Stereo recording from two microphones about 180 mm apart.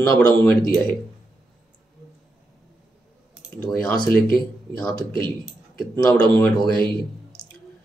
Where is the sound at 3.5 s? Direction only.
5° left (ahead or behind).